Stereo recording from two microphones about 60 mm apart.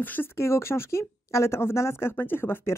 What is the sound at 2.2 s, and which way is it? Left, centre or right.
Speech, left.